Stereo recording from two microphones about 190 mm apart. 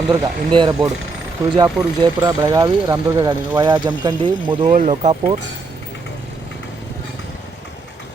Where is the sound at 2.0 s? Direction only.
20° right (ahead or behind).